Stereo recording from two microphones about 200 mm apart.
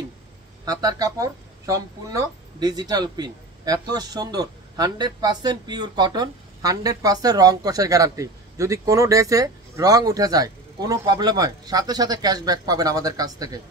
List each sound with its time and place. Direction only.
0.7 s speech: 20° right (ahead or behind)